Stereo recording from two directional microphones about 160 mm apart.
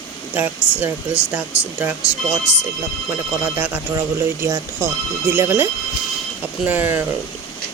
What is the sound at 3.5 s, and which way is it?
Speech, 10° right (ahead or behind).